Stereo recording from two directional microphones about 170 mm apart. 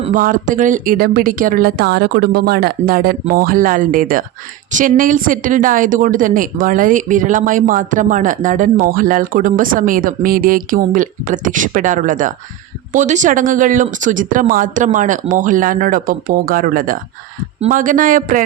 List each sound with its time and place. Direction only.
0.0 s a woman's voice: 50° right (ahead or behind)